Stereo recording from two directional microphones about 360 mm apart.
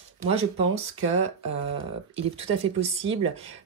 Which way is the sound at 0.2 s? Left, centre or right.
Centre.